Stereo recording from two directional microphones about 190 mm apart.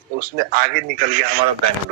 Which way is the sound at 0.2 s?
50° right (ahead or behind).